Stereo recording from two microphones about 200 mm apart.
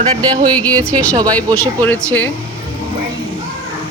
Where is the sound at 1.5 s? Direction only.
10° left (ahead or behind).